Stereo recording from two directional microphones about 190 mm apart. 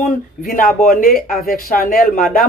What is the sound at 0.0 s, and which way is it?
Speech, 50° left (ahead or behind).